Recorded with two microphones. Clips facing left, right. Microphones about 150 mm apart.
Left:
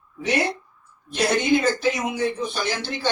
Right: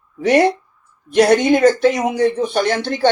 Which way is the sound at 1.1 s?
60° right (ahead or behind).